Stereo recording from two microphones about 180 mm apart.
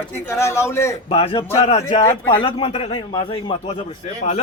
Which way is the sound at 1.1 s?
30° left (ahead or behind).